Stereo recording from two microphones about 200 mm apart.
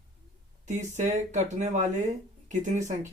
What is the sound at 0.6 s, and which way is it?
Speech, 35° right (ahead or behind).